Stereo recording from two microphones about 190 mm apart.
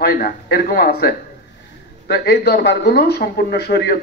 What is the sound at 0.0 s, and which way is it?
A man's voice, 55° left (ahead or behind).